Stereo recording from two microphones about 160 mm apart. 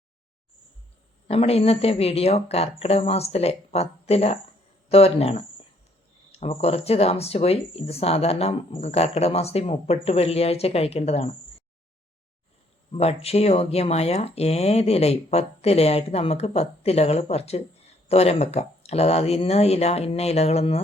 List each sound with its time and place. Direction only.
1.3 s speech: 40° left (ahead or behind)
12.9 s speech: 40° left (ahead or behind)